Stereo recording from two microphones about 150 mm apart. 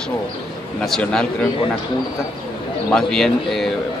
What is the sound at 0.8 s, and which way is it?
Speech, 5° left (ahead or behind).